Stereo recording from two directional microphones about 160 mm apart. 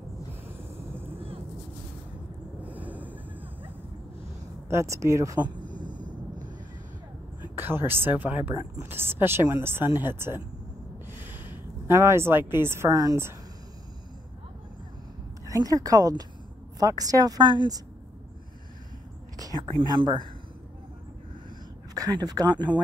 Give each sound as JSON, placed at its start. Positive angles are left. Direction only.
{"t": 2.6, "sound": "a sound", "side_deg": -10}
{"t": 4.6, "sound": "speech", "side_deg": -15}
{"t": 5.8, "sound": "a sound", "side_deg": -25}
{"t": 7.5, "sound": "speech", "side_deg": -15}
{"t": 15.4, "sound": "speech", "side_deg": -20}
{"t": 19.3, "sound": "whispering", "side_deg": -20}
{"t": 19.6, "sound": "speech", "side_deg": -30}
{"t": 22.2, "sound": "speech", "side_deg": -25}